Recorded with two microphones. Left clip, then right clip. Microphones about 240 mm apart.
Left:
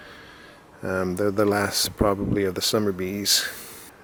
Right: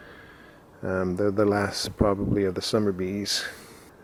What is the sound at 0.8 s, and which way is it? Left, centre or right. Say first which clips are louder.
Speech: left 1 dB; centre.